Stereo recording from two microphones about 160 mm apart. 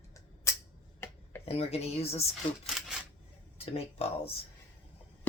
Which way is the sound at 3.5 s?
40° left (ahead or behind).